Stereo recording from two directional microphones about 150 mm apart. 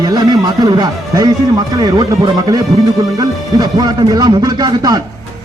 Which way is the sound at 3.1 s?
25° right (ahead or behind).